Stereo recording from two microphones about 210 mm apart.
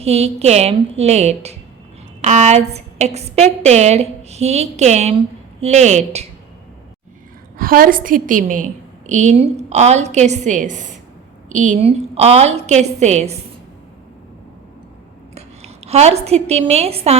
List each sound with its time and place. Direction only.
0.0 s a woman's voice: 30° right (ahead or behind)
7.6 s a woman's voice: 40° right (ahead or behind)
15.4 s a woman's voice: 30° right (ahead or behind)